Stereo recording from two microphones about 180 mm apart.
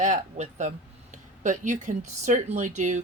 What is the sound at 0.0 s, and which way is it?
Speech, 45° right (ahead or behind).